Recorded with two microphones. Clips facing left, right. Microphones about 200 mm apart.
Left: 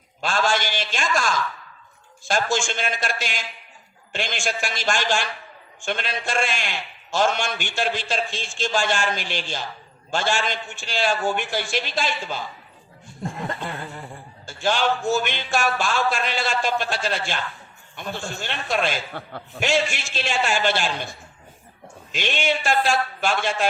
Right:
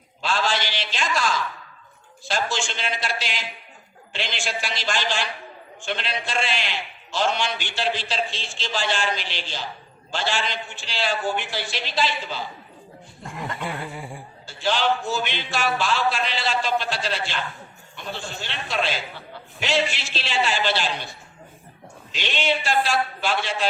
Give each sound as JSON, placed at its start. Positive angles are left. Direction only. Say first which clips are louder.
{"t": 0.2, "sound": "a man's voice", "louder": "left 2 dB", "side_deg": 45}
{"t": 13.2, "sound": "chuckle", "louder": "left 4 dB", "side_deg": 30}
{"t": 13.6, "sound": "chuckle", "louder": "right 1 dB", "side_deg": -10}
{"t": 14.4, "sound": "a man's voice", "louder": "left 1 dB", "side_deg": 45}